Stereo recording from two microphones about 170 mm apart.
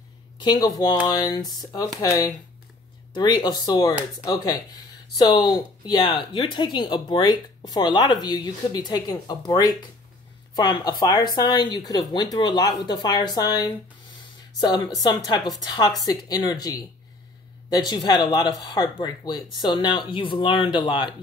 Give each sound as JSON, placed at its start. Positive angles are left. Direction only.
{"t": 0.4, "sound": "speech", "side_deg": 25}